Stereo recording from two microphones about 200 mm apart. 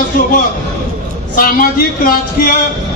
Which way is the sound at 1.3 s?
45° left (ahead or behind).